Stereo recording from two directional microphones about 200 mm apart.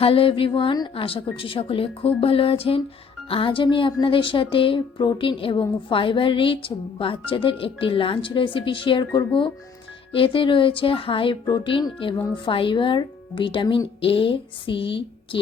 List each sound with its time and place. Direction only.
0.0 s a woman's voice: 25° left (ahead or behind)